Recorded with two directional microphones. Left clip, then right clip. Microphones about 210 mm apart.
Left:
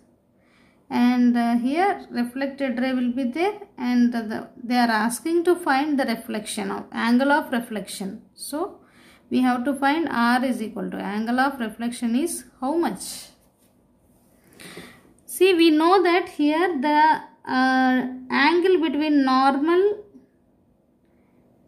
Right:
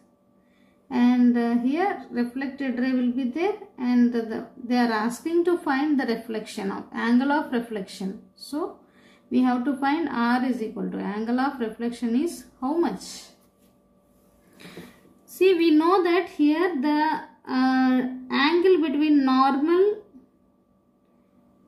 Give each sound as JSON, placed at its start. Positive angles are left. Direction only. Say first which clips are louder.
{"t": 0.8, "sound": "a woman's voice", "louder": "left 1 dB", "side_deg": 50}
{"t": 14.6, "sound": "a woman's voice", "louder": "left 3 dB", "side_deg": 50}